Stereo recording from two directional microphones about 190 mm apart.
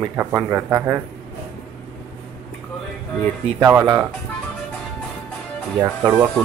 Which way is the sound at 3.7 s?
15° right (ahead or behind).